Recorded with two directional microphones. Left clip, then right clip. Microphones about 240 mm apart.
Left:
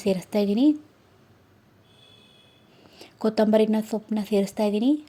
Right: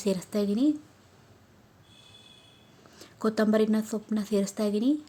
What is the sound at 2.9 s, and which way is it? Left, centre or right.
A woman's voice, centre.